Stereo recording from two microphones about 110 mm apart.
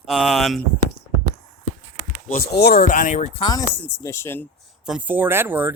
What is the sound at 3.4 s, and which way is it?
Speech, 35° left (ahead or behind).